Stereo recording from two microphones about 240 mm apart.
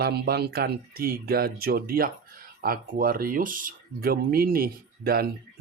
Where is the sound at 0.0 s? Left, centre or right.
Right.